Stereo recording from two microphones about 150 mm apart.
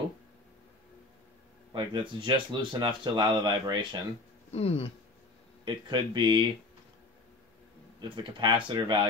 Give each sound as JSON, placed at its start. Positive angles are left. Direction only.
{"t": 1.7, "sound": "speech", "side_deg": -30}
{"t": 4.5, "sound": "speech", "side_deg": 45}
{"t": 5.9, "sound": "speech", "side_deg": -30}
{"t": 8.0, "sound": "speech", "side_deg": -35}